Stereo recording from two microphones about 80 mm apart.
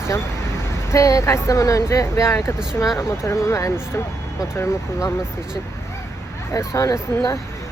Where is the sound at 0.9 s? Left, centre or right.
Left.